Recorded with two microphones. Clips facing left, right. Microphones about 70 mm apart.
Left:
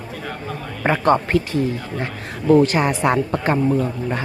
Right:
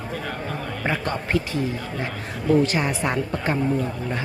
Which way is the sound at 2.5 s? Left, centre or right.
Left.